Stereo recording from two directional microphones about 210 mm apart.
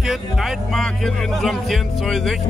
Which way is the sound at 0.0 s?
Centre (ahead or behind).